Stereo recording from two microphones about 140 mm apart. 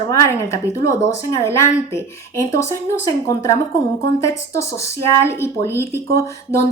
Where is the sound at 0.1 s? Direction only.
20° left (ahead or behind).